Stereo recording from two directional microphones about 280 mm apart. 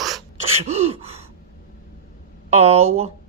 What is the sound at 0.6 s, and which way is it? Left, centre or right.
Gasp, right.